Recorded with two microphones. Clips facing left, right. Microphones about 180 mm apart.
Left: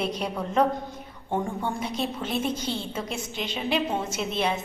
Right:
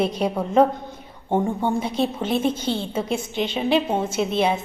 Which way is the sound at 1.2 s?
25° right (ahead or behind).